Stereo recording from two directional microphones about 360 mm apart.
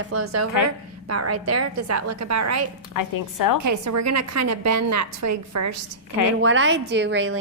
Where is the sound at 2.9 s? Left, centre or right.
Left.